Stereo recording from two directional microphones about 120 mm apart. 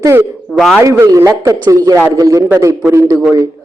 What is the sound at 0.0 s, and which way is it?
Speech, 20° right (ahead or behind).